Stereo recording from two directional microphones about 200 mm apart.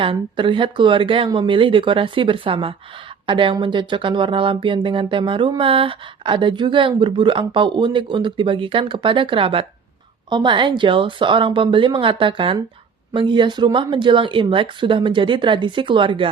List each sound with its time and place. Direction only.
0.0 s speech: 25° right (ahead or behind)